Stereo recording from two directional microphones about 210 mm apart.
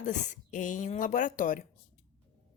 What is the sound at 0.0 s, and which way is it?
Speech, 35° left (ahead or behind).